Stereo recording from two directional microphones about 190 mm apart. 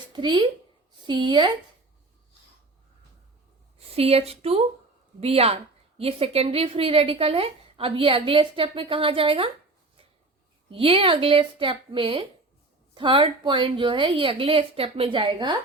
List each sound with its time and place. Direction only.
0.1 s a woman's voice: 25° right (ahead or behind)
3.8 s a woman's voice: 30° right (ahead or behind)
10.7 s a woman's voice: 30° right (ahead or behind)